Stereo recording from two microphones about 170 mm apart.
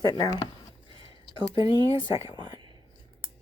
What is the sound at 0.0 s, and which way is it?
Speech, 25° left (ahead or behind).